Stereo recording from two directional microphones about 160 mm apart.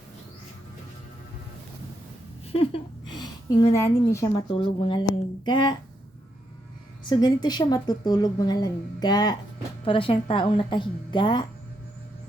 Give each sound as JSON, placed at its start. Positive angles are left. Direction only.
{"t": 2.5, "sound": "a sound", "side_deg": 35}
{"t": 3.9, "sound": "a woman's voice", "side_deg": 20}
{"t": 4.5, "sound": "a woman's voice", "side_deg": 35}
{"t": 7.1, "sound": "a woman's voice", "side_deg": 25}